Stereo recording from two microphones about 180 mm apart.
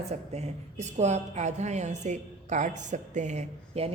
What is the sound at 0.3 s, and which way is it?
A woman's voice, 40° right (ahead or behind).